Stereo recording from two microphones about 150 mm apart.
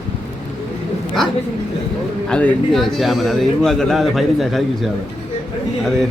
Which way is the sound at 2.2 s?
5° left (ahead or behind).